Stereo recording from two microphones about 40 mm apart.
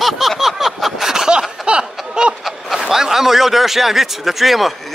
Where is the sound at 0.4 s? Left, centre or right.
Centre; by 2.3 s right.